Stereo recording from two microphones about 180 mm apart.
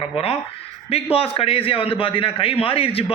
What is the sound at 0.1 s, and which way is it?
Speech, 30° left (ahead or behind).